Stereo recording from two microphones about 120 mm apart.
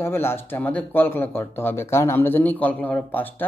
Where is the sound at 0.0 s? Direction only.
20° left (ahead or behind).